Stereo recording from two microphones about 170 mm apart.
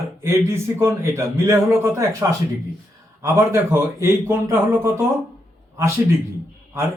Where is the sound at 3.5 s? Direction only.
15° right (ahead or behind).